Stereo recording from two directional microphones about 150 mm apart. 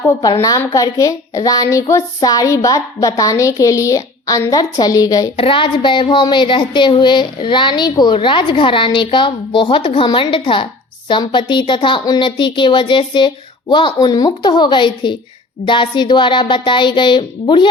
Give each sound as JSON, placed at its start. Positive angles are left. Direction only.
{"t": 0.2, "sound": "a woman's voice", "side_deg": 25}
{"t": 5.4, "sound": "child singing", "side_deg": 35}